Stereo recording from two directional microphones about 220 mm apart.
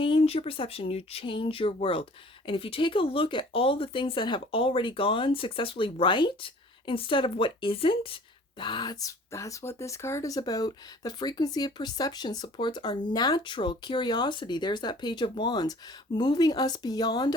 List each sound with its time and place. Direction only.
0.0 s speech: 25° left (ahead or behind)